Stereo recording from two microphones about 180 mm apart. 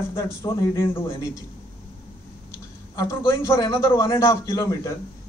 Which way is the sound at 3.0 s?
15° left (ahead or behind).